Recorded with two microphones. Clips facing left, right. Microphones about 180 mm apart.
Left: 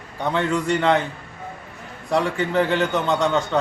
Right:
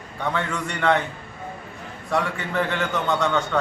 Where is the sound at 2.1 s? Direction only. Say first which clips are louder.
Left 4 dB; 25° left (ahead or behind).